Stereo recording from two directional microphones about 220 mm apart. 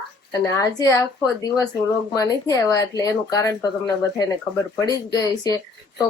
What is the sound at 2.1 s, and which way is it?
Speech, 15° left (ahead or behind).